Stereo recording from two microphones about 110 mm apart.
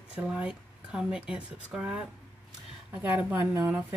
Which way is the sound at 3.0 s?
15° right (ahead or behind).